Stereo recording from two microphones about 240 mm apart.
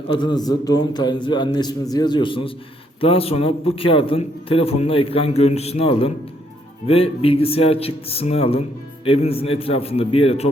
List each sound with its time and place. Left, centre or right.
0.1 s a man's voice: centre